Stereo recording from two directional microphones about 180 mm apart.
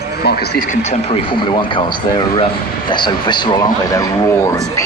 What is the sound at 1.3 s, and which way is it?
A man's voice, 25° left (ahead or behind).